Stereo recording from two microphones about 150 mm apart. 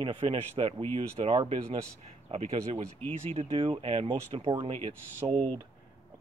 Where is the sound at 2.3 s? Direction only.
45° right (ahead or behind).